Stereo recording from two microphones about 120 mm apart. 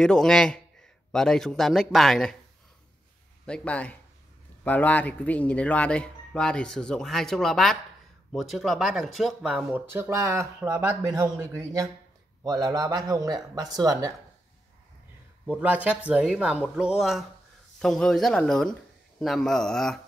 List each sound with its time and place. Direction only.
0.0 s speech: 5° left (ahead or behind)
3.4 s speech: 10° left (ahead or behind)
9.5 s speech: 10° right (ahead or behind); by 14.1 s 30° right (ahead or behind)
15.5 s speech: 15° right (ahead or behind); by 20.0 s 5° left (ahead or behind)